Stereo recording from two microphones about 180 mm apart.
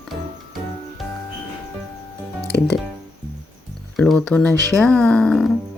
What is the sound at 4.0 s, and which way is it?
Speech, 5° left (ahead or behind).